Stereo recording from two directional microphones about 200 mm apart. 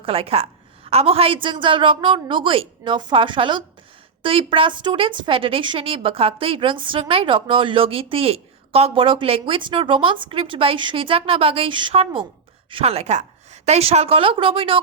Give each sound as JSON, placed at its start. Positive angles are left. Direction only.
{"t": 0.0, "sound": "a woman's voice", "side_deg": -30}